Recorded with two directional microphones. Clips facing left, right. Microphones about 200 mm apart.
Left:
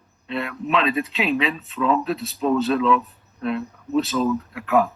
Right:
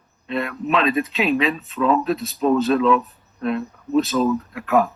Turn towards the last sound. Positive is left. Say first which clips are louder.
# right 1 dB
turn(degrees=-45)  # may be behind; listen again after turning